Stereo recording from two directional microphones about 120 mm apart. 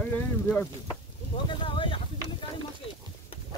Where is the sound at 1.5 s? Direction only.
45° left (ahead or behind).